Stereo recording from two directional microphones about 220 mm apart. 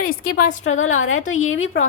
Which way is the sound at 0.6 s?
70° left (ahead or behind).